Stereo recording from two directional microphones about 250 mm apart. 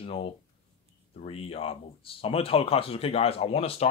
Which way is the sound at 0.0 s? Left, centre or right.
Left.